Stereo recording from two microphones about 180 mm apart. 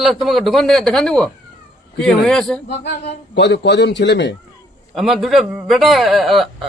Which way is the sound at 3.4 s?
75° left (ahead or behind).